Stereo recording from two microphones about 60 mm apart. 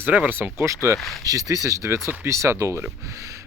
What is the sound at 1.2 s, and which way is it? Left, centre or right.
Speech, right.